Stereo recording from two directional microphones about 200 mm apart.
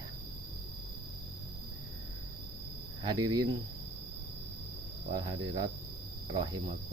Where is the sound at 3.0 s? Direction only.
20° right (ahead or behind).